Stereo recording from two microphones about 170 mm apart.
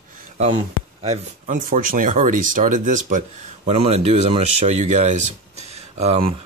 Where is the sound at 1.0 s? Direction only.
50° right (ahead or behind).